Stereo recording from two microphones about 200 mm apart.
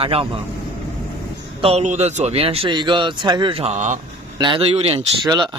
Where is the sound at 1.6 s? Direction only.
35° right (ahead or behind).